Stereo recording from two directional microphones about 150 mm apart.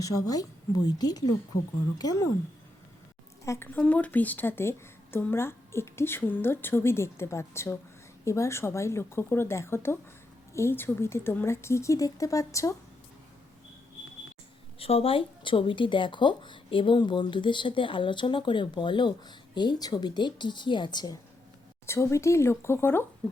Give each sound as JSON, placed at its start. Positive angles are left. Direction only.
{"t": 0.0, "sound": "speech", "side_deg": 25}
{"t": 3.4, "sound": "a woman's voice", "side_deg": 15}
{"t": 14.8, "sound": "speech", "side_deg": 40}
{"t": 21.8, "sound": "a woman's voice", "side_deg": 20}